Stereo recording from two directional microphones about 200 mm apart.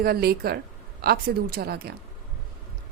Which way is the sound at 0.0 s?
50° right (ahead or behind).